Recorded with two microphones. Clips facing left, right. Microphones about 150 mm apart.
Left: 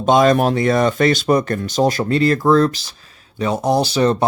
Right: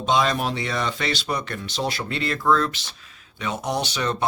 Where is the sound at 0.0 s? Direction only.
50° left (ahead or behind).